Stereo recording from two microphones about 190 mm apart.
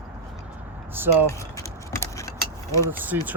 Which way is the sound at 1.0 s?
10° right (ahead or behind).